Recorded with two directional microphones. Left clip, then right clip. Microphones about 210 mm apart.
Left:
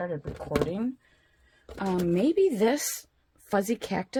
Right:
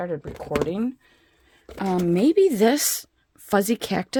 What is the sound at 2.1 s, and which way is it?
Speech, 55° right (ahead or behind).